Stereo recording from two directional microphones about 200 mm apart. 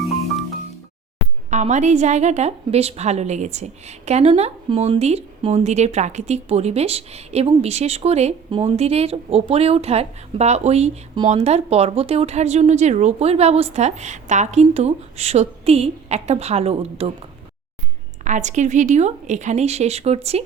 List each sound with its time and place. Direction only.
1.5 s a woman's voice: 35° right (ahead or behind)
18.3 s a woman's voice: 35° right (ahead or behind)